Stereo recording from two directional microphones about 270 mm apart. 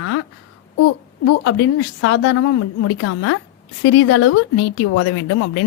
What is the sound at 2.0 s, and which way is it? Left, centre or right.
Speech, left.